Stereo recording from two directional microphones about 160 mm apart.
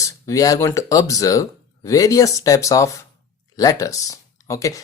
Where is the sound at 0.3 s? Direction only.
20° left (ahead or behind).